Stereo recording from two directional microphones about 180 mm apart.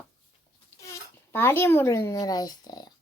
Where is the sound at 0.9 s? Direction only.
10° left (ahead or behind).